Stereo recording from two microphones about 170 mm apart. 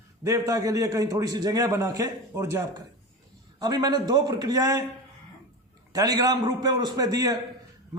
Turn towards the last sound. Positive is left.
turn(degrees=-20)  # may be behind; listen again after turning